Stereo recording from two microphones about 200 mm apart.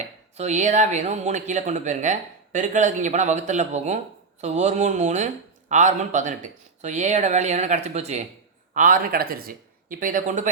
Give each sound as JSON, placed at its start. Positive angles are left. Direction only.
{"t": 0.3, "sound": "speech", "side_deg": -35}